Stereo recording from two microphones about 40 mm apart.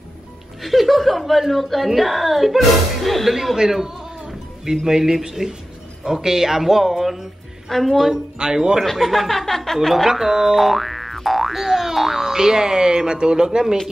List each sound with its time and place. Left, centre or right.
0.6 s speech: centre
3.5 s music: centre
4.8 s a woman's voice: centre
8.1 s speech: centre
8.9 s speech: centre
10.0 s speech: centre